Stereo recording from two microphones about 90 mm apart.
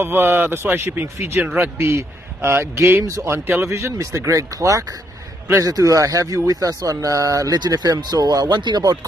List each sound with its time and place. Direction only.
0.0 s a man's voice: 25° right (ahead or behind)
1.4 s a man's voice: 15° right (ahead or behind)
1.8 s a man's voice: 30° right (ahead or behind); by 8.5 s 45° right (ahead or behind)
8.5 s speech: 60° right (ahead or behind)